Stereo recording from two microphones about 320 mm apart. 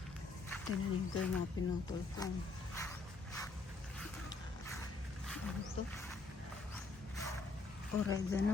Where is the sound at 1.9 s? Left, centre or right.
Centre.